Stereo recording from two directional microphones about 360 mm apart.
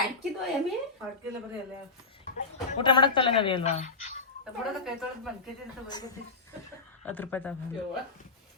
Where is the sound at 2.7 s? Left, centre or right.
Centre.